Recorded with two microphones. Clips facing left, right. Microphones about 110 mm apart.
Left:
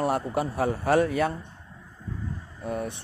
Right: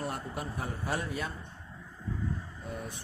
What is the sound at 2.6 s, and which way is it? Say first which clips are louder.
Speech: left 11 dB; 65° left (ahead or behind).